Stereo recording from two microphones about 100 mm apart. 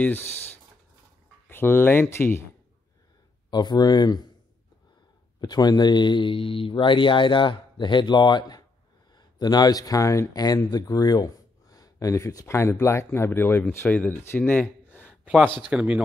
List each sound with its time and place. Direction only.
1.5 s speech: 20° left (ahead or behind)
3.4 s speech: 45° left (ahead or behind)
5.4 s speech: 40° left (ahead or behind)
10.4 s speech: 40° left (ahead or behind); by 15.1 s 15° left (ahead or behind)
15.7 s speech: 10° right (ahead or behind)